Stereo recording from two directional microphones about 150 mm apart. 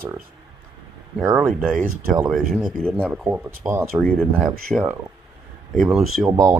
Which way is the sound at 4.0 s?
5° left (ahead or behind).